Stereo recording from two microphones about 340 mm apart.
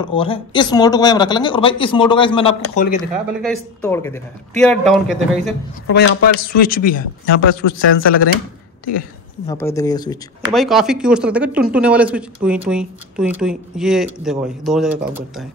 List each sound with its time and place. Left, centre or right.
0.0 s a man's voice: centre
3.0 s speech: centre
5.9 s speech: left
7.0 s speech: left
7.9 s speech: left
9.5 s a man's voice: centre
10.5 s speech: centre